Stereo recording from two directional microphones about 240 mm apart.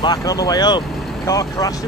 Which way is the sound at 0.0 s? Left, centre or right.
Centre.